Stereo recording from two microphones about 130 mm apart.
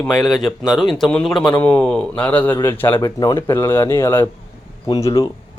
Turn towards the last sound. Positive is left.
turn(degrees=25)  # may be behind; listen again after turning